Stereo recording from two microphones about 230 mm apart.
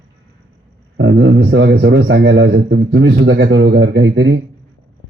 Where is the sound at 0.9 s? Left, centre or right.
Right.